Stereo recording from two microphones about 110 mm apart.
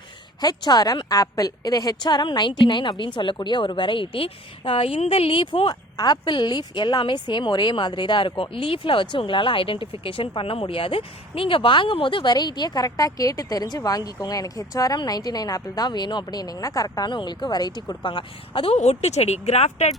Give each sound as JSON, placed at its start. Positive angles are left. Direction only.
{"t": 0.4, "sound": "a woman's voice", "side_deg": 40}
{"t": 5.6, "sound": "speech", "side_deg": 40}
{"t": 18.7, "sound": "speech", "side_deg": 80}